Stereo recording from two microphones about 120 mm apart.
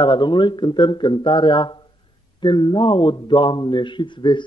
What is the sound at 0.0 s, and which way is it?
Speech, 40° left (ahead or behind).